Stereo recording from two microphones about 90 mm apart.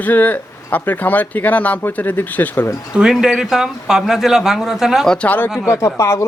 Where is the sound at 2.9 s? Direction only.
5° right (ahead or behind).